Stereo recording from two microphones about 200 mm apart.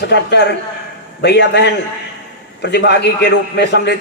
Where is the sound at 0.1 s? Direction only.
55° left (ahead or behind).